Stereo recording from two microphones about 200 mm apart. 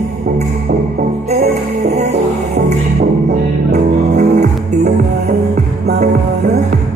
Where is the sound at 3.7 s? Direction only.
35° right (ahead or behind).